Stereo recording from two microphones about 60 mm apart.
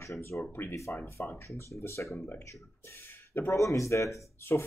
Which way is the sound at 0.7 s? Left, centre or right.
Left.